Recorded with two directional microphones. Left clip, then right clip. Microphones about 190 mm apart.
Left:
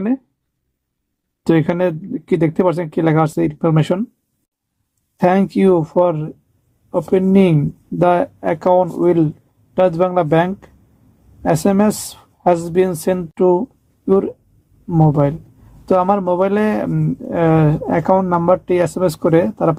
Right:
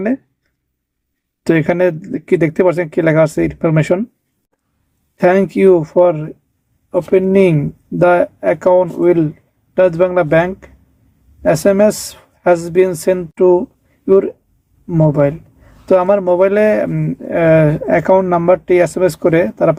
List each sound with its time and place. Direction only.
1.5 s speech: 25° left (ahead or behind)
5.2 s speech: 25° left (ahead or behind)
14.8 s speech: centre (ahead or behind)
15.1 s speech: 25° left (ahead or behind)